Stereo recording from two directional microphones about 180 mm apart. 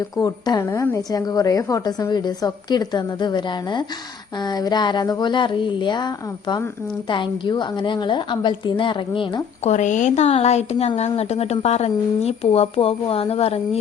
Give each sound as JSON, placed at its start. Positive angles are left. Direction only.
{"t": 0.2, "sound": "a woman's voice", "side_deg": 20}
{"t": 9.6, "sound": "speech", "side_deg": 40}